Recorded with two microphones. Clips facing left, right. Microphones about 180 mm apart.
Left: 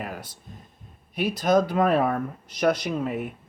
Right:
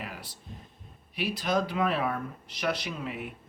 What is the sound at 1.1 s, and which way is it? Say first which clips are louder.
Speech: left 7 dB; 45° left (ahead or behind).